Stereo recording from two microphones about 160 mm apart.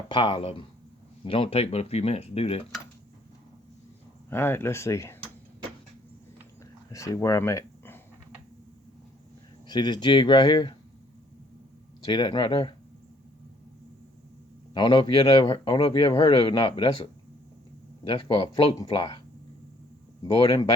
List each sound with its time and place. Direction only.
0.1 s a man's voice: 35° left (ahead or behind)
4.3 s speech: 15° left (ahead or behind)
6.9 s speech: 20° left (ahead or behind)
9.6 s speech: 25° left (ahead or behind)
12.0 s speech: 30° left (ahead or behind)
14.7 s a man's voice: 25° left (ahead or behind)